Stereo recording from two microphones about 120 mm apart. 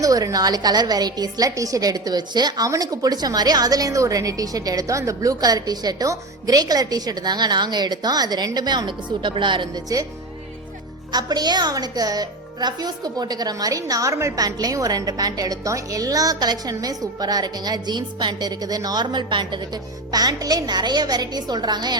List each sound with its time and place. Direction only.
0.0 s a woman's voice: 30° right (ahead or behind)
11.1 s a woman's voice: 35° right (ahead or behind)